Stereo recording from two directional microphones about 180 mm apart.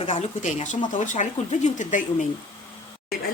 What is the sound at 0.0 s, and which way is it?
Speech, 40° left (ahead or behind).